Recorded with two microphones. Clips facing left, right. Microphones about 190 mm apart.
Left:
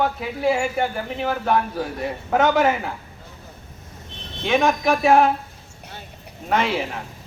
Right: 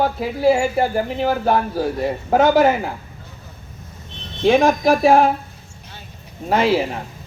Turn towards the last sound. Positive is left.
turn(degrees=-35)  # may be behind; listen again after turning